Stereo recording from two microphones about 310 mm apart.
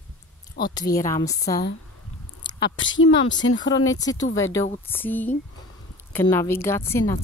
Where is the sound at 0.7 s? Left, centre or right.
Centre.